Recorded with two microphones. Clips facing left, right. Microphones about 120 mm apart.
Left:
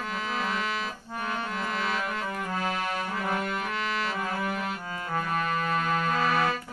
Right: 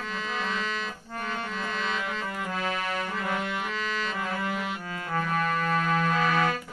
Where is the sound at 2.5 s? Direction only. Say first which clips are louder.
Even; 5° left (ahead or behind).